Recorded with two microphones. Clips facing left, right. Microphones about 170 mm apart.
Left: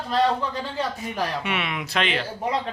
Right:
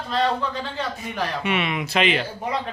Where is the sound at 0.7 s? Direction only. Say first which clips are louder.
Left 1 dB; 5° left (ahead or behind).